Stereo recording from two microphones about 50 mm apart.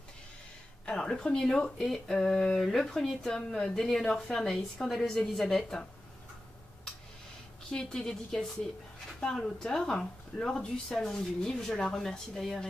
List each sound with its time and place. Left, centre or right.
0.8 s speech: centre
7.7 s speech: centre